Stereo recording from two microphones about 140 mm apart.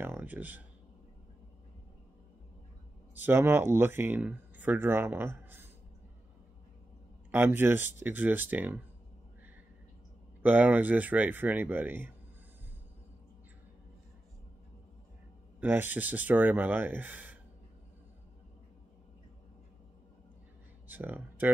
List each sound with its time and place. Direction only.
0.0 s a sound: 15° right (ahead or behind)
3.3 s speech: 15° right (ahead or behind)
7.2 s speech: 15° right (ahead or behind)
10.4 s speech: 10° right (ahead or behind)
15.6 s speech: 15° right (ahead or behind)
20.9 s speech: 15° right (ahead or behind)